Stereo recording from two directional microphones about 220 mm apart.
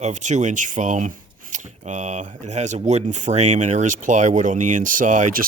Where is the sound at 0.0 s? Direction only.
35° right (ahead or behind).